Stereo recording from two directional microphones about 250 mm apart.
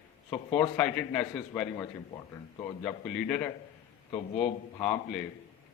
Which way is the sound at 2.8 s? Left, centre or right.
Centre.